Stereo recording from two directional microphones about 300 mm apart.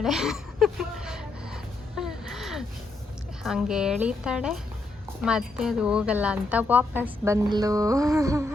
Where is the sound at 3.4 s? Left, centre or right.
Centre.